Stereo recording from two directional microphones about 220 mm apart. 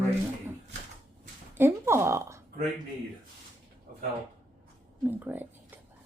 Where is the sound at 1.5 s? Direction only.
10° right (ahead or behind).